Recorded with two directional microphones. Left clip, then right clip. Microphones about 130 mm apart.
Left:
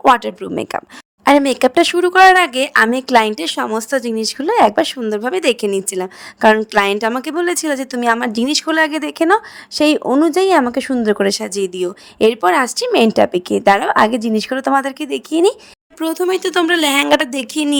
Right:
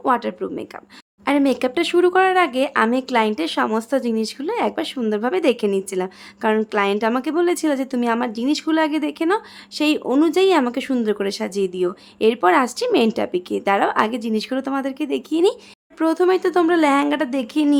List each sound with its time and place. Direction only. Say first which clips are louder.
0.1 s speech: left 6 dB; 60° left (ahead or behind); by 10.1 s 45° left (ahead or behind)
10.1 s speech: even; 35° left (ahead or behind); by 15.5 s 50° left (ahead or behind)
16.0 s speech: even; 10° left (ahead or behind)
16.3 s a woman's voice: left 2 dB; 85° left